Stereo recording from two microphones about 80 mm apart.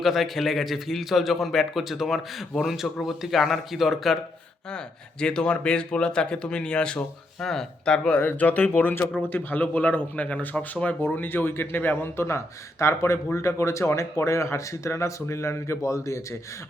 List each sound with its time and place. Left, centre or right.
0.0 s a man's voice: centre
5.2 s speech: centre
8.2 s speech: left